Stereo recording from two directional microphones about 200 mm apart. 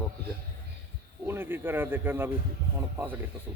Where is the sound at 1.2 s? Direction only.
10° right (ahead or behind).